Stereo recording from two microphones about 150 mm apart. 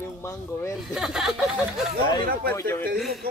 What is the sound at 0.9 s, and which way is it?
Speech, 5° right (ahead or behind).